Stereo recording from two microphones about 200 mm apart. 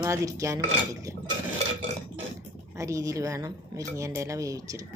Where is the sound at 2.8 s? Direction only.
15° right (ahead or behind).